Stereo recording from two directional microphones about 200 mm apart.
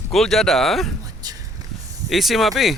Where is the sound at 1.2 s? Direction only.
20° right (ahead or behind).